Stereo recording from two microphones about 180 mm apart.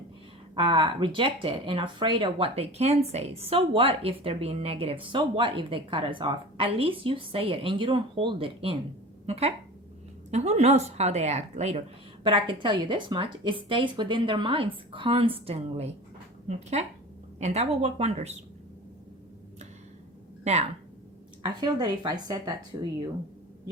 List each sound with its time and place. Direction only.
0.5 s a woman's voice: 30° right (ahead or behind)
20.4 s speech: 40° right (ahead or behind)
21.4 s speech: 25° right (ahead or behind)